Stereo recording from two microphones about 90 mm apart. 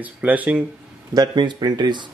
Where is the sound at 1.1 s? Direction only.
50° right (ahead or behind).